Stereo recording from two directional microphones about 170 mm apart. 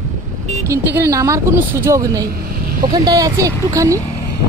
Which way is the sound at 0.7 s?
15° right (ahead or behind).